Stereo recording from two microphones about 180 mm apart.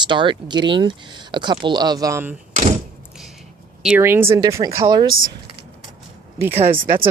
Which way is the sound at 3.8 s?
10° right (ahead or behind).